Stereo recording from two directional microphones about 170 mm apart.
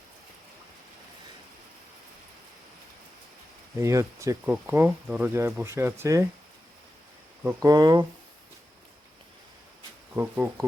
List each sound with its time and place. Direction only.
3.8 s speech: 15° right (ahead or behind)
7.4 s speech: 20° right (ahead or behind)
10.2 s speech: 15° right (ahead or behind)